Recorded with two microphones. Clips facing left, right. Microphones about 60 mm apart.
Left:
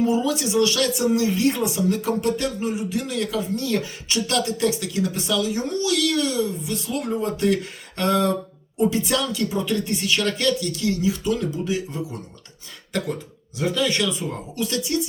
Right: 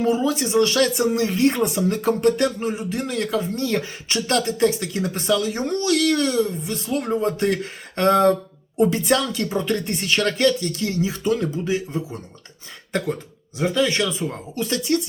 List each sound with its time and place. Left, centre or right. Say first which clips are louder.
0.1 s speech: right 1 dB; right
13.6 s speech: right 2 dB; right